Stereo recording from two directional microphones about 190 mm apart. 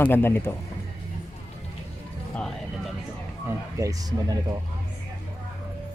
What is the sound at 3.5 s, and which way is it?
Speech, 15° right (ahead or behind).